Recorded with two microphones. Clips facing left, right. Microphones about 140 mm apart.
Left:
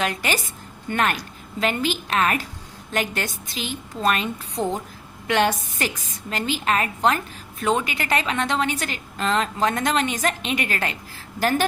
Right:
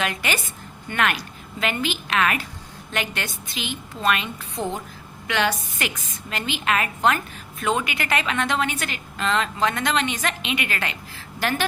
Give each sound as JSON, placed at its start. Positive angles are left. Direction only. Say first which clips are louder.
{"t": 0.0, "sound": "a woman's voice", "louder": "left 1 dB", "side_deg": 35}
{"t": 4.5, "sound": "a woman's voice", "louder": "left 2 dB", "side_deg": 0}
{"t": 5.3, "sound": "a woman's voice", "louder": "left 3 dB", "side_deg": 45}